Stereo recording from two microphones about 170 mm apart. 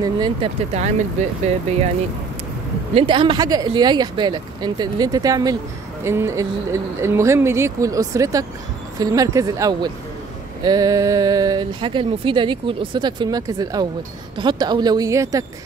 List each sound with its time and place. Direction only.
0.0 s speech: 25° right (ahead or behind)
0.7 s speech: 35° right (ahead or behind)
2.9 s speech: 30° right (ahead or behind)